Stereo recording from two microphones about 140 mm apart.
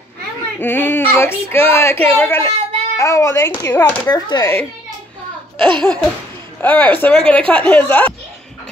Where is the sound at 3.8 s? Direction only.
30° left (ahead or behind).